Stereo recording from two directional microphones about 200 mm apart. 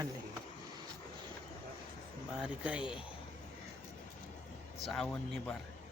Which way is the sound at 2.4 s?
5° right (ahead or behind).